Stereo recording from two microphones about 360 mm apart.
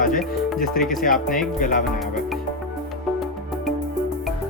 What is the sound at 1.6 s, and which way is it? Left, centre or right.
Speech, left.